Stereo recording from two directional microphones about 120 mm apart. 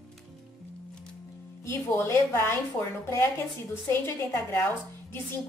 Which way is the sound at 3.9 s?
20° left (ahead or behind).